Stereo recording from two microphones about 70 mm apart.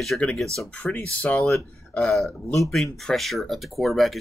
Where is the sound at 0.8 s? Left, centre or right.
Left.